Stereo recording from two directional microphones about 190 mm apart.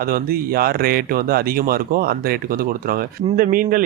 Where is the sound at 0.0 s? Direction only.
50° right (ahead or behind).